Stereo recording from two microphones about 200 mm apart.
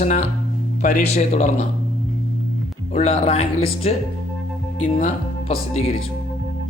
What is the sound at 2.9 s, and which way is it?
Speech, 30° left (ahead or behind).